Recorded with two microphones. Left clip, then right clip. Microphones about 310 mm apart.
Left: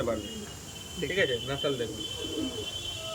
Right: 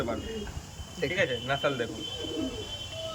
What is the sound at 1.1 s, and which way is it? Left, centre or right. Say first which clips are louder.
Speech: left 1 dB; centre.